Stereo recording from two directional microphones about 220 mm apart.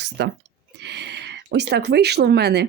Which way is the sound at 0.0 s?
50° right (ahead or behind).